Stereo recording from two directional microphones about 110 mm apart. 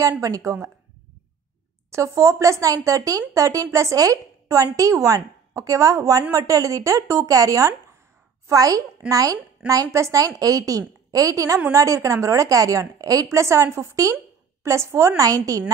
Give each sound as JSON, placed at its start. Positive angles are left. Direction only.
{"t": 0.2, "sound": "speech", "side_deg": -30}
{"t": 1.9, "sound": "a woman's voice", "side_deg": -25}